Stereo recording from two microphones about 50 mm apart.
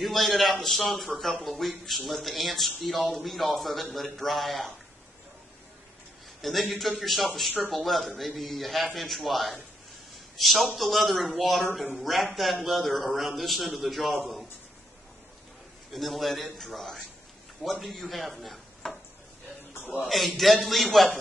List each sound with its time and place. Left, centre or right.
0.0 s a man's voice: centre
6.4 s a man's voice: centre
15.9 s a man's voice: centre
19.7 s a sound: left
20.1 s a man's voice: centre